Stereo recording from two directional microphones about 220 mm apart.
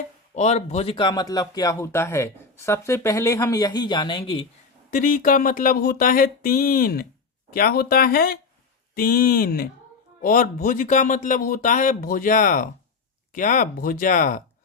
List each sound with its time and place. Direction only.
0.3 s speech: 30° left (ahead or behind)
4.9 s speech: 35° left (ahead or behind)